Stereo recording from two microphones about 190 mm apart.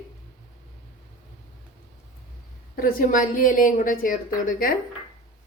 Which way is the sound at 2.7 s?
50° left (ahead or behind).